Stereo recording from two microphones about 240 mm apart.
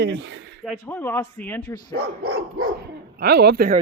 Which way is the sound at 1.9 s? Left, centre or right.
Right.